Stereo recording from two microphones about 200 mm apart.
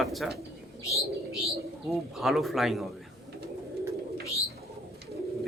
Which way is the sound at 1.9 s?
Centre (ahead or behind).